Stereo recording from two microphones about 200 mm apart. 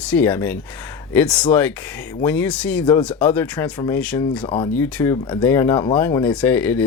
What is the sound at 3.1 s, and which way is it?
Speech, 10° left (ahead or behind).